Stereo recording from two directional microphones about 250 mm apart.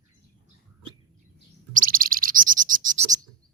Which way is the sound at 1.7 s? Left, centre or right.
Right.